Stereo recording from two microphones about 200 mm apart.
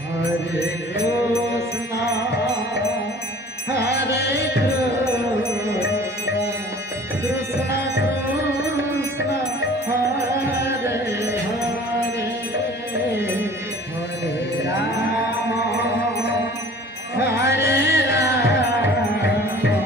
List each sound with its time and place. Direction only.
3.7 s music: 55° left (ahead or behind)
7.2 s music: 15° right (ahead or behind)
10.7 s music: 15° right (ahead or behind)
13.1 s music: 15° right (ahead or behind)
17.5 s music: 60° left (ahead or behind)